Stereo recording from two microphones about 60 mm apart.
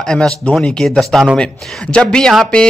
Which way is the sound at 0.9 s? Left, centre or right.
Centre.